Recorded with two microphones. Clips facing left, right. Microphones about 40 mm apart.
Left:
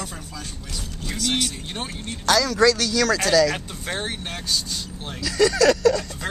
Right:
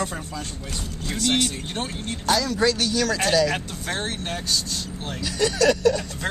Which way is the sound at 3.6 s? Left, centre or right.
Centre.